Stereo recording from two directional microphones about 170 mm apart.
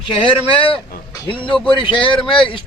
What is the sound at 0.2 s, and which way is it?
Speech, 30° left (ahead or behind).